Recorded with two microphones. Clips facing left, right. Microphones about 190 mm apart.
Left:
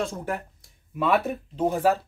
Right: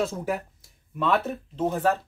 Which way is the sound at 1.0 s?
10° left (ahead or behind).